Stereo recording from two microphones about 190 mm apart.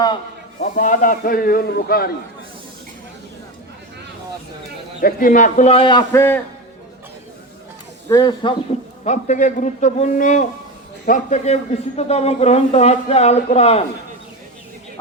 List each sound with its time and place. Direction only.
0.6 s a man's voice: 45° left (ahead or behind)
4.9 s a man's voice: 50° left (ahead or behind); by 6.4 s 15° left (ahead or behind)
8.0 s speech: 20° left (ahead or behind)
9.0 s a man's voice: 40° left (ahead or behind)